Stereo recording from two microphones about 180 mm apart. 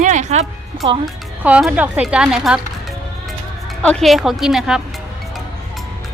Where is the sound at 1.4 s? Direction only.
10° right (ahead or behind).